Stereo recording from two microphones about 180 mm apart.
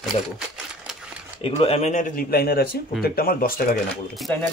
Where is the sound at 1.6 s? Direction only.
35° left (ahead or behind); by 3.6 s 55° left (ahead or behind).